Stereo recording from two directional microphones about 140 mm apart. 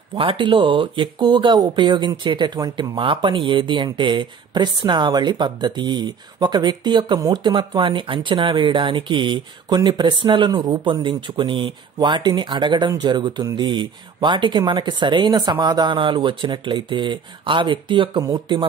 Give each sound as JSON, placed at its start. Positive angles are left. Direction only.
{"t": 0.1, "sound": "speech", "side_deg": -35}